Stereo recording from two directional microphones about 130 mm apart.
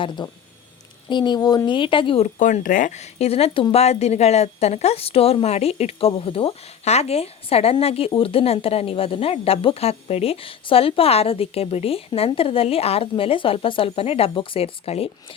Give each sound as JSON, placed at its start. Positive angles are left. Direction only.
{"t": 0.2, "sound": "speech", "side_deg": 35}
{"t": 2.2, "sound": "speech", "side_deg": 80}